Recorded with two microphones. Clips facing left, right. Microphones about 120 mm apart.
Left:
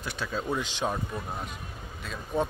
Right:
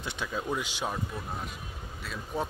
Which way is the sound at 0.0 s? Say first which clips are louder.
Left 1 dB; 20° right (ahead or behind).